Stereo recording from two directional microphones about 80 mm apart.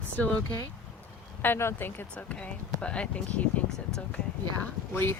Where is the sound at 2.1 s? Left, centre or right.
Centre.